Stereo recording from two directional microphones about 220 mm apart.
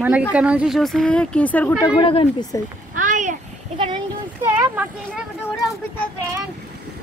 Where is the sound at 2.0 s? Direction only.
25° left (ahead or behind).